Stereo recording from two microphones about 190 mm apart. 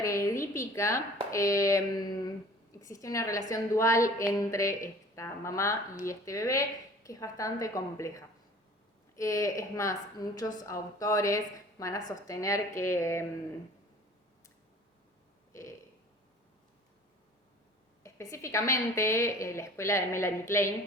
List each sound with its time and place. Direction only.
0.0 s a woman's voice: 15° left (ahead or behind)
18.0 s a woman's voice: 15° left (ahead or behind)